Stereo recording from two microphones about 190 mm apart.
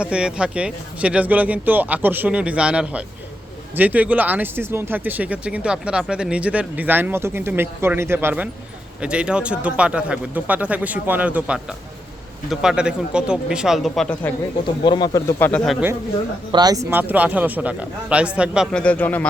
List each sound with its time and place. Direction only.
0.0 s speech: 5° right (ahead or behind)
14.8 s speech: 20° left (ahead or behind)
15.4 s speech: 10° left (ahead or behind)
16.5 s speech: 20° right (ahead or behind); by 19.3 s 10° left (ahead or behind)